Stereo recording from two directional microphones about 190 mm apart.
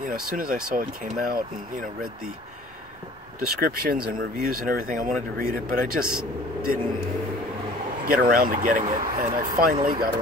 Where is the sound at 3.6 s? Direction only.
50° right (ahead or behind).